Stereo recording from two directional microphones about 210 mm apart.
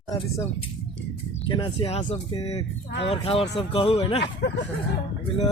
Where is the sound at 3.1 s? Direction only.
25° left (ahead or behind).